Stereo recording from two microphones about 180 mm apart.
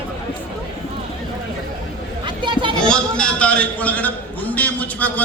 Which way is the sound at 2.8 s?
5° left (ahead or behind).